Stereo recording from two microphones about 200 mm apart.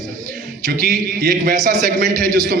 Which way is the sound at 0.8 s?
45° right (ahead or behind).